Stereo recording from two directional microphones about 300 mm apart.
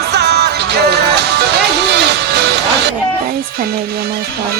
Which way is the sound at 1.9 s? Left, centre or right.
Right.